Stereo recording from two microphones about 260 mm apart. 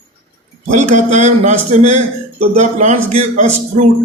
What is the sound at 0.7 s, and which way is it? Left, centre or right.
A man's voice, right.